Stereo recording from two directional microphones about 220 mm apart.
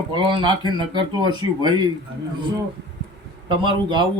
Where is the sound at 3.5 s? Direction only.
20° right (ahead or behind).